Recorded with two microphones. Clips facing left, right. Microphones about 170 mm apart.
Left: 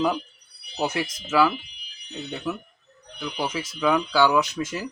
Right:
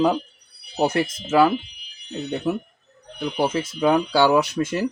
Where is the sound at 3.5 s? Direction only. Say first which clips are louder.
Right 1 dB; 55° right (ahead or behind).